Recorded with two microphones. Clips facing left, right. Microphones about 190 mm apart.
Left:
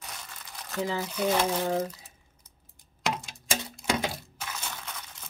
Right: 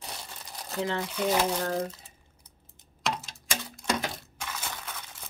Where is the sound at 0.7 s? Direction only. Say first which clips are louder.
Even; centre (ahead or behind).